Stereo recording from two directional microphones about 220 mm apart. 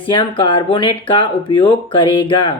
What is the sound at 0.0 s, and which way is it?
Speech, 20° left (ahead or behind).